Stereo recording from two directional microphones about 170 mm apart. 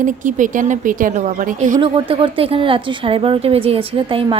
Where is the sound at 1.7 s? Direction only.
30° right (ahead or behind).